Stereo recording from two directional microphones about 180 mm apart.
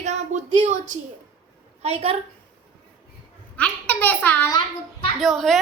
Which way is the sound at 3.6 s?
10° left (ahead or behind).